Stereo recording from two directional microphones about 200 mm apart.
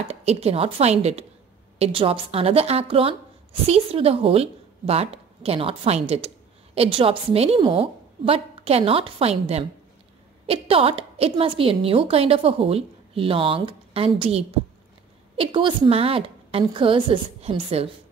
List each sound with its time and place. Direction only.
0.1 s a woman's voice: 30° right (ahead or behind)